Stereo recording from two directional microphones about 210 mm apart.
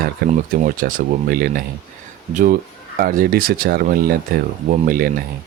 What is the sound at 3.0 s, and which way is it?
Speech, 40° right (ahead or behind).